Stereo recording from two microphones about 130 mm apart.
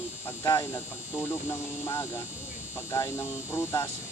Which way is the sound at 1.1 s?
15° left (ahead or behind).